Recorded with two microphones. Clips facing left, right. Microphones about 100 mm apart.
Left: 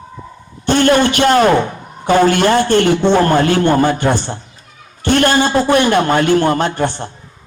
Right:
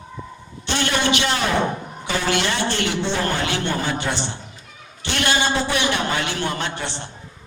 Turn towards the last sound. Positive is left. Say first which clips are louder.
# left 11 dB
turn(degrees=45)  # may be behind; listen again after turning